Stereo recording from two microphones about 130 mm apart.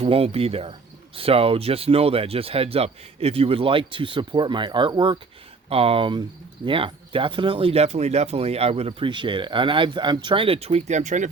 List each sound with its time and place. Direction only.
0.0 s speech: 50° right (ahead or behind); by 11.3 s 70° right (ahead or behind)